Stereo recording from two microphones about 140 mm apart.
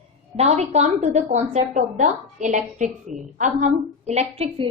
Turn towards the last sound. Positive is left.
turn(degrees=-50)  # may be behind; listen again after turning